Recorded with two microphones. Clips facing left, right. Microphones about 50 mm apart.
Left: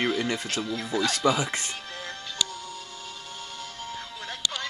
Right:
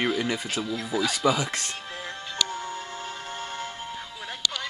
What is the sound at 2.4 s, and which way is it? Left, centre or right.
Music, right.